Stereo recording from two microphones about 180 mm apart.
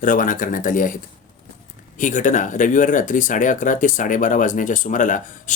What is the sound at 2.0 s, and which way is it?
Speech, 45° left (ahead or behind).